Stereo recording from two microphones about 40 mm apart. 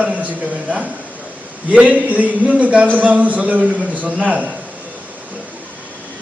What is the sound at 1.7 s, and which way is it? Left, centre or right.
A man's voice, right.